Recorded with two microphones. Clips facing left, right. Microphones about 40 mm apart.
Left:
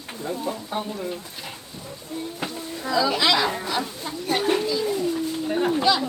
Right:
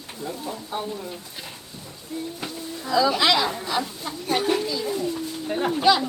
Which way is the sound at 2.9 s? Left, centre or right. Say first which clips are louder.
Right 1 dB; centre.